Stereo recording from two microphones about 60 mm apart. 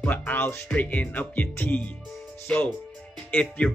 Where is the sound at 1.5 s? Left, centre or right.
Left.